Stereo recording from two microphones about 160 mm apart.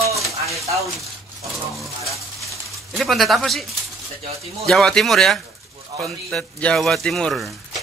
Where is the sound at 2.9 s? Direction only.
Centre (ahead or behind).